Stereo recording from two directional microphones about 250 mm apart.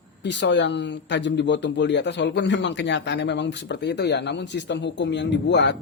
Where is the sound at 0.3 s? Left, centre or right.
Left.